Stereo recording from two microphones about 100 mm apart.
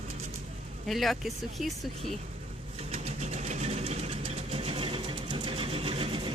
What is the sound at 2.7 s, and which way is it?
Vehicle, 90° right.